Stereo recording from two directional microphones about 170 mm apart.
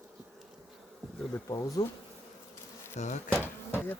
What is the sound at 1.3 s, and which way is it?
Speech, 20° left (ahead or behind).